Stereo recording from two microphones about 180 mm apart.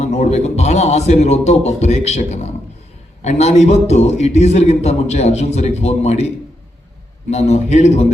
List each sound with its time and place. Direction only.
0.0 s a man's voice: 40° left (ahead or behind)